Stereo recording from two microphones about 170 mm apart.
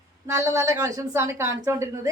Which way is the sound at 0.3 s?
15° right (ahead or behind).